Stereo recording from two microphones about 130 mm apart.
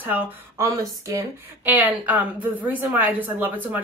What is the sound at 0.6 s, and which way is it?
Speech, 25° right (ahead or behind).